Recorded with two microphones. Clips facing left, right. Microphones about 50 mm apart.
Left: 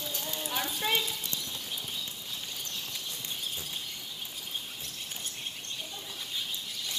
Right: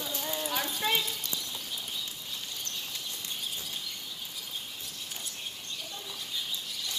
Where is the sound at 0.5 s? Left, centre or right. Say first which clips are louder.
Even; centre.